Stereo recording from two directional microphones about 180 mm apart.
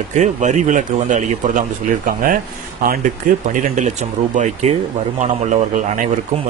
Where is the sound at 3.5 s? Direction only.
45° right (ahead or behind).